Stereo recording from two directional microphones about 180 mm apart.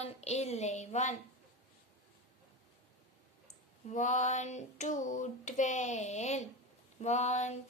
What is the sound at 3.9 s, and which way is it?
Female singing, 45° left (ahead or behind).